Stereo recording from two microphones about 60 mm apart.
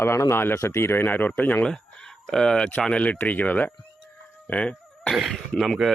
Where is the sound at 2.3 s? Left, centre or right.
Centre; by 3.7 s left.